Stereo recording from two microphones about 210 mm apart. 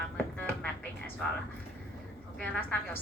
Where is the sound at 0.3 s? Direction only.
10° left (ahead or behind).